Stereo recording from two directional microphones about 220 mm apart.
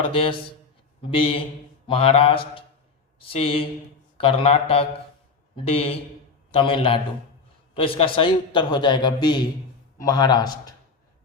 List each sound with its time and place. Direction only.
0.1 s a man's voice: 25° left (ahead or behind)
1.9 s a man's voice: 25° left (ahead or behind)